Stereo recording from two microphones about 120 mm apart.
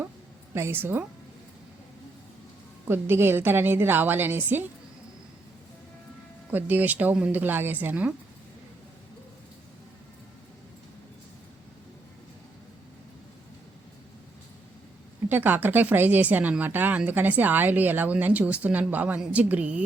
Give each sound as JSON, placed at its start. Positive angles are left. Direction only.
{"t": 0.5, "sound": "a woman's voice", "side_deg": -20}
{"t": 2.8, "sound": "speech", "side_deg": -20}
{"t": 6.5, "sound": "speech", "side_deg": -15}
{"t": 15.3, "sound": "speech", "side_deg": -15}